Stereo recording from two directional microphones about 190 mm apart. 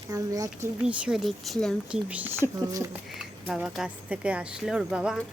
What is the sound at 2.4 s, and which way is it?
Speech, 20° left (ahead or behind).